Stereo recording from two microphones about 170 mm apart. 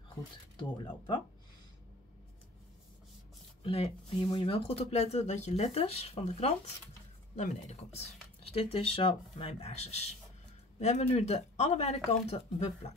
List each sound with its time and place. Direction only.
0.6 s speech: 25° left (ahead or behind)
3.6 s speech: 35° left (ahead or behind)